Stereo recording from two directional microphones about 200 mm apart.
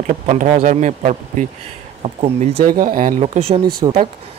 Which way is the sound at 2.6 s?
45° right (ahead or behind).